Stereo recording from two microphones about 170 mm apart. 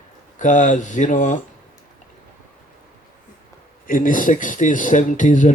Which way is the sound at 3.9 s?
50° left (ahead or behind).